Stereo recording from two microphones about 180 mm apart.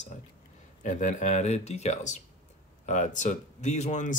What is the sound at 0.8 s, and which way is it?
Speech, 45° left (ahead or behind).